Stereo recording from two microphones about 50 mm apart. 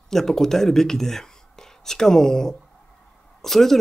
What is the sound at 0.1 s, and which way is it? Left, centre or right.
Speech, centre.